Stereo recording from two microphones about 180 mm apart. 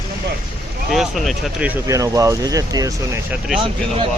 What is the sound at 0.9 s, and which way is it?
Speech, centre (ahead or behind).